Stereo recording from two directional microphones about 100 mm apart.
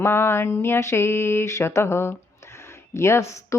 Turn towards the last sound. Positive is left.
turn(degrees=30)  # may be behind; listen again after turning